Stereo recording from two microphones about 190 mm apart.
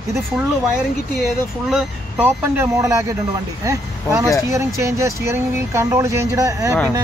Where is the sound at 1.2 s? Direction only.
5° right (ahead or behind).